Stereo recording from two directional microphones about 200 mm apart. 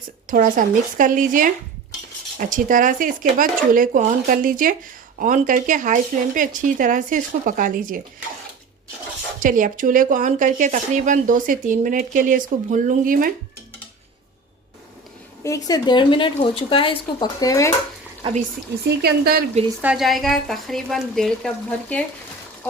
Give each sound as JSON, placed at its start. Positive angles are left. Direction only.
{"t": 0.3, "sound": "speech", "side_deg": -40}
{"t": 9.4, "sound": "speech", "side_deg": -40}
{"t": 15.4, "sound": "a woman's voice", "side_deg": 15}
{"t": 18.9, "sound": "speech", "side_deg": -50}
{"t": 19.8, "sound": "speech", "side_deg": -5}